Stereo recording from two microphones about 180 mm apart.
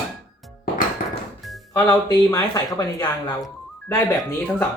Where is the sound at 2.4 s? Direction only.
25° left (ahead or behind).